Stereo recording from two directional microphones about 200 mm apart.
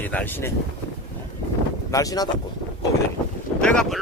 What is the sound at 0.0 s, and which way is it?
Speech, 10° left (ahead or behind).